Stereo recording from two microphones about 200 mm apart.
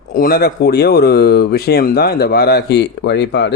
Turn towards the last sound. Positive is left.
turn(degrees=60)  # may be behind; listen again after turning